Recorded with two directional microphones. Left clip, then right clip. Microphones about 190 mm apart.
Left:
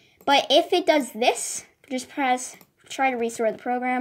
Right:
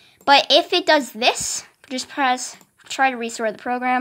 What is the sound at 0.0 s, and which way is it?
A woman's voice, 20° right (ahead or behind).